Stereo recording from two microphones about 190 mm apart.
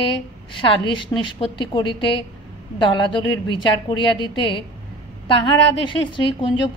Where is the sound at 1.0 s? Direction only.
25° left (ahead or behind).